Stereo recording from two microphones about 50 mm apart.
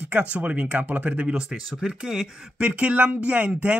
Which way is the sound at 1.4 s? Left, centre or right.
Centre.